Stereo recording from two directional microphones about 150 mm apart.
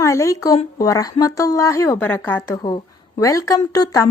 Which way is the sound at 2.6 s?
30° left (ahead or behind).